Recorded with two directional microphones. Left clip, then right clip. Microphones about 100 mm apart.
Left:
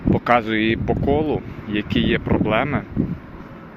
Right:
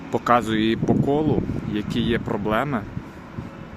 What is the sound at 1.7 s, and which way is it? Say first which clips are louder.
Speech: left 5 dB; 15° right (ahead or behind).